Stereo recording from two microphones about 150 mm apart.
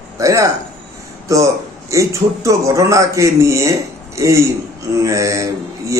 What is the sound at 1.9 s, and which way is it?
A man's voice, 20° right (ahead or behind).